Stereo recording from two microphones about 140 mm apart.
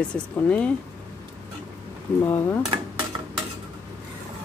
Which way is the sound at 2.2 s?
15° left (ahead or behind).